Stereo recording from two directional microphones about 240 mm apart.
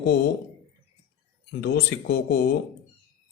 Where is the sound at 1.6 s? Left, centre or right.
Left.